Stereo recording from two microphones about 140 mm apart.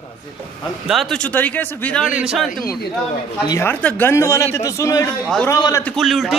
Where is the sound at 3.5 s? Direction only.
20° left (ahead or behind).